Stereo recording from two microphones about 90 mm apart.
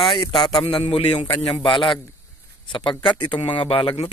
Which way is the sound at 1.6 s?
65° left (ahead or behind).